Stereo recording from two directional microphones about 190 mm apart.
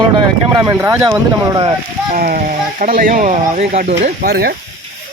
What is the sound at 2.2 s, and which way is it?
Speech, 45° right (ahead or behind).